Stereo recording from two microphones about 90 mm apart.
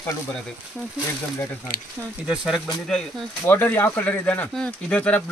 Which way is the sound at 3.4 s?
20° left (ahead or behind).